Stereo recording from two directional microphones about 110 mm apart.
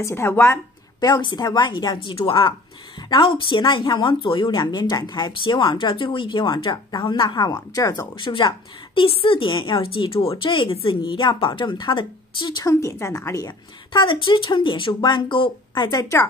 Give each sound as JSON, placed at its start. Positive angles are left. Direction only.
{"t": 0.0, "sound": "a woman's voice", "side_deg": 20}
{"t": 1.0, "sound": "a woman's voice", "side_deg": 40}
{"t": 2.1, "sound": "a woman's voice", "side_deg": 50}
{"t": 3.0, "sound": "a sound", "side_deg": 40}
{"t": 3.3, "sound": "a woman's voice", "side_deg": 50}
{"t": 8.2, "sound": "a woman's voice", "side_deg": 45}
{"t": 12.6, "sound": "a woman's voice", "side_deg": 30}